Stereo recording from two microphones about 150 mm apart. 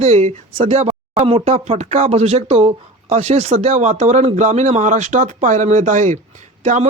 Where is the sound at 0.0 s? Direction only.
50° right (ahead or behind).